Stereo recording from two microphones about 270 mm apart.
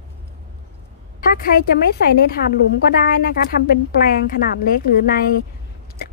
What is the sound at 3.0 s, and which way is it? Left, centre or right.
Speech, left.